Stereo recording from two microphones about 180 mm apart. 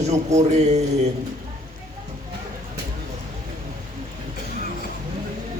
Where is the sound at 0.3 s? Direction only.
40° right (ahead or behind).